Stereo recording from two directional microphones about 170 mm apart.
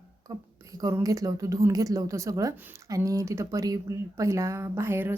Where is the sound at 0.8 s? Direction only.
20° right (ahead or behind).